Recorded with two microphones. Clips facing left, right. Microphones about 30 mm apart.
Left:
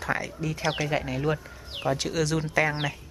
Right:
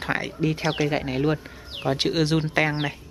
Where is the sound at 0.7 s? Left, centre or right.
Centre.